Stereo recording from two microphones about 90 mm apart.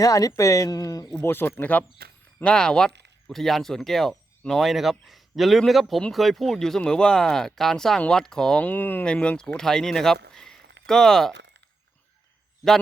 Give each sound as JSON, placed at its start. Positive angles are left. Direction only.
{"t": 0.0, "sound": "speech", "side_deg": 40}
{"t": 1.2, "sound": "speech", "side_deg": 25}
{"t": 8.6, "sound": "speech", "side_deg": 20}